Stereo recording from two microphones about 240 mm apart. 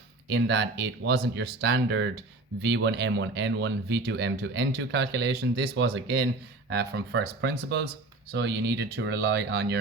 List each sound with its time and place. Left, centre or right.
0.3 s speech: right